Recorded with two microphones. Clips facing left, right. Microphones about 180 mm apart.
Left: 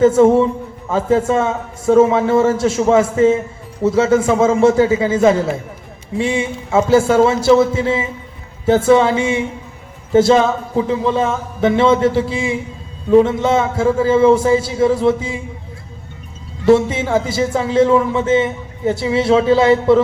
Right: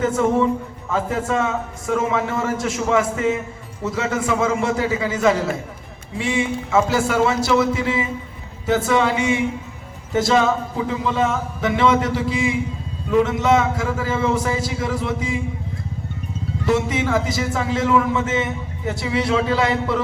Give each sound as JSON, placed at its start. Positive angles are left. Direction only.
{"t": 0.0, "sound": "a man's voice", "side_deg": 30}
{"t": 16.6, "sound": "a man's voice", "side_deg": 30}